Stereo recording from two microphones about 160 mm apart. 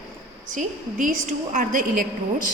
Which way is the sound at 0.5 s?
50° right (ahead or behind).